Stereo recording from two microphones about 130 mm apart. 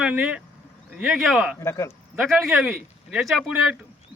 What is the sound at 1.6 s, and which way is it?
Speech, 25° left (ahead or behind).